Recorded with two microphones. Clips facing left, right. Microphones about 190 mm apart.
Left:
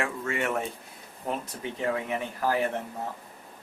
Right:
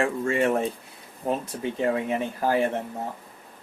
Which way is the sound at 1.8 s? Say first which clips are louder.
Right 4 dB; 30° right (ahead or behind).